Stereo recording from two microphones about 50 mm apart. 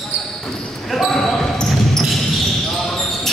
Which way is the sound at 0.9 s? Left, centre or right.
Centre.